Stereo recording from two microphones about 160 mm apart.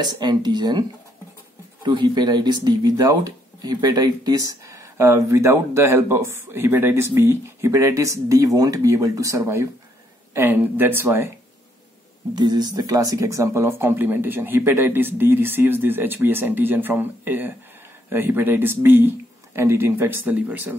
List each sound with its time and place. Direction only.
0.0 s speech: 25° right (ahead or behind)
12.4 s speech: 25° right (ahead or behind)